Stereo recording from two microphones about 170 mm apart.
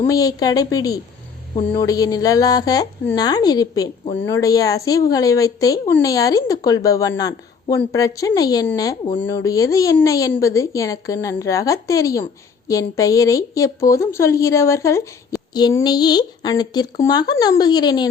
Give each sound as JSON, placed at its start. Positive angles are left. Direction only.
{"t": 0.1, "sound": "a woman's voice", "side_deg": 20}